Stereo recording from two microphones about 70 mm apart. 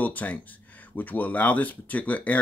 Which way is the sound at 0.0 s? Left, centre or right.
Left.